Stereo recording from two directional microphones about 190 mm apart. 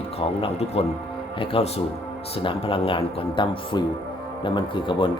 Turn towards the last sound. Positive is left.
turn(degrees=25)  # may be behind; listen again after turning